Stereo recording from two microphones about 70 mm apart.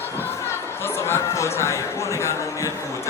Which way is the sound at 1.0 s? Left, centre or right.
Left.